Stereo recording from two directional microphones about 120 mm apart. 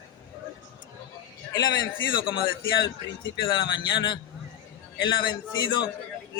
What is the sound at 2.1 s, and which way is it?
Speech, 40° left (ahead or behind).